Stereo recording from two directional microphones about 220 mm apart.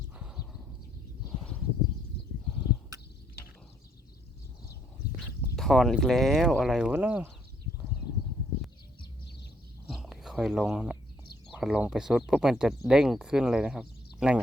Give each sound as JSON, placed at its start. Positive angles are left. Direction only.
{"t": 0.2, "sound": "horse", "side_deg": -5}
{"t": 5.4, "sound": "speech", "side_deg": 0}
{"t": 9.9, "sound": "a sound", "side_deg": 0}
{"t": 11.5, "sound": "speech", "side_deg": -5}